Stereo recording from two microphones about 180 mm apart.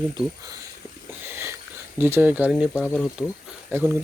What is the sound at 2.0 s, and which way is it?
Speech, 10° right (ahead or behind).